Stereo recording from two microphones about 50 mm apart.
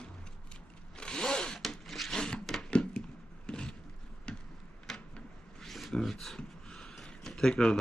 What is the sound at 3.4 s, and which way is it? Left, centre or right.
Vehicle, centre.